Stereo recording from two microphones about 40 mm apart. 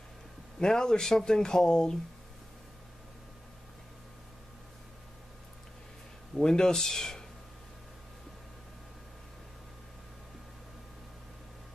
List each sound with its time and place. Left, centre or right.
0.6 s speech: centre
6.3 s speech: centre